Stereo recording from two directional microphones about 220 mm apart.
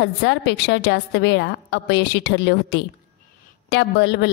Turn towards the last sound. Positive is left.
turn(degrees=55)  # may be behind; listen again after turning